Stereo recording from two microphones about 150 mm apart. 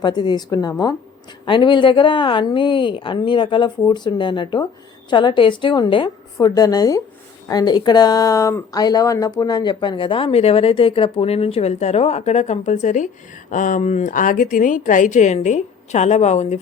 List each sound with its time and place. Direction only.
0.0 s a woman's voice: 30° left (ahead or behind); by 16.6 s 50° left (ahead or behind)